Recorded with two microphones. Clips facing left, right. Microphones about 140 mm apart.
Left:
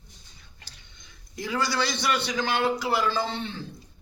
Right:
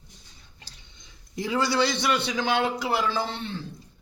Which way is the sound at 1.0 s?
25° right (ahead or behind).